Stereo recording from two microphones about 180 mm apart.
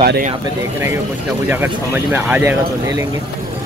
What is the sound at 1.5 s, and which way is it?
Speech, 10° right (ahead or behind).